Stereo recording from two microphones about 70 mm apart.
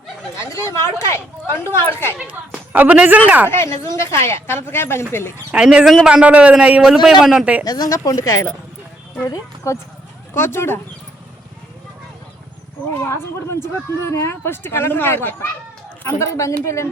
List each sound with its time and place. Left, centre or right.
0.3 s speech: left
2.1 s speech: centre
3.5 s speech: left
5.5 s a man's voice: centre
6.8 s a man's voice: centre
7.6 s speech: left
7.9 s speech: left
10.3 s speech: left
12.9 s speech: left
16.0 s speech: left